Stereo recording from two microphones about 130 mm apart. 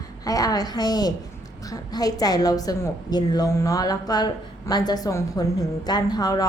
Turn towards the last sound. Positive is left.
turn(degrees=30)  # may be behind; listen again after turning